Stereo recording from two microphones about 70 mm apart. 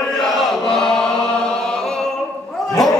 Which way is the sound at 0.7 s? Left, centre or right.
Centre.